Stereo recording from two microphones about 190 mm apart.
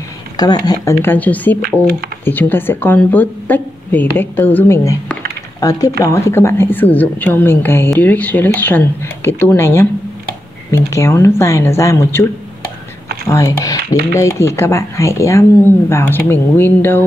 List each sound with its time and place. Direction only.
0.4 s speech: 20° left (ahead or behind)
1.6 s speech: 55° right (ahead or behind)
2.2 s speech: 10° left (ahead or behind)
13.3 s speech: 15° left (ahead or behind)